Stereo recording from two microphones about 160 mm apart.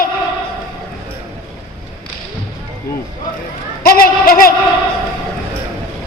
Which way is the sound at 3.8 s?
65° left (ahead or behind).